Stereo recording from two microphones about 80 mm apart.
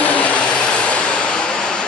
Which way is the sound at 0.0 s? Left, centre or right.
Centre.